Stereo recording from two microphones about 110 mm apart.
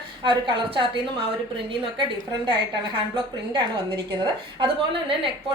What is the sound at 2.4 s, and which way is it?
A woman's voice, 50° right (ahead or behind).